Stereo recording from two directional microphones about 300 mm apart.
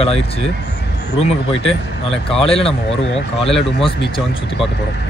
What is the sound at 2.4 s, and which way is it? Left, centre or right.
Speech, centre.